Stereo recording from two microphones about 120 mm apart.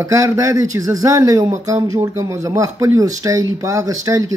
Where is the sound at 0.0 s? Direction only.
25° right (ahead or behind).